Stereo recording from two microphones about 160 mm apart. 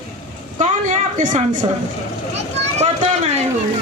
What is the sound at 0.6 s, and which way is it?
Speech, 50° right (ahead or behind).